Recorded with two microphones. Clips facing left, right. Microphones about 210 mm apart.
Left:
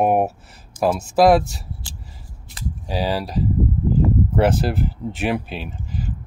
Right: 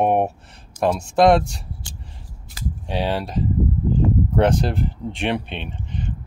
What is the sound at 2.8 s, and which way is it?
Speech, centre (ahead or behind).